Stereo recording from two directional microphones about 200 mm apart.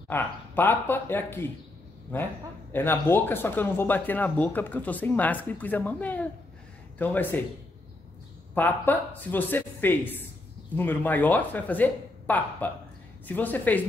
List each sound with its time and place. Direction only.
0.1 s speech: 10° left (ahead or behind)
8.5 s speech: 10° left (ahead or behind)